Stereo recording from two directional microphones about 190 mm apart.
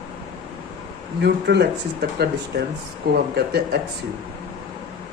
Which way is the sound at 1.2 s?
60° right (ahead or behind).